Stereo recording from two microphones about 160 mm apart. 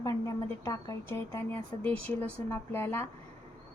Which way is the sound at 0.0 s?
20° left (ahead or behind).